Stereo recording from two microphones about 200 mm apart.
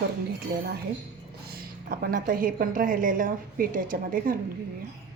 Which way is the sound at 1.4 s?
50° right (ahead or behind).